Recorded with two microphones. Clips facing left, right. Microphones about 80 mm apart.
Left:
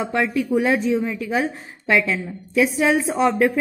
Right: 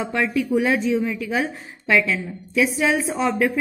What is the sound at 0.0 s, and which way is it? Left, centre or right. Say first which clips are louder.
A woman's voice: left 1 dB; left.